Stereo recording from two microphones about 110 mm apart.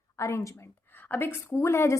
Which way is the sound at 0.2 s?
25° left (ahead or behind).